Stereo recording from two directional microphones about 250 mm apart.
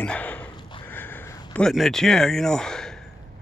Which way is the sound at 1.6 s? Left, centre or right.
Centre.